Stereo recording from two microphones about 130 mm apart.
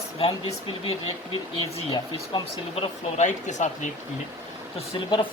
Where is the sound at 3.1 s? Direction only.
65° left (ahead or behind).